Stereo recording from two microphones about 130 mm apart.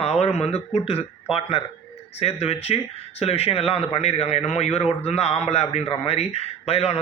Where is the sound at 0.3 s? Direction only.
55° left (ahead or behind).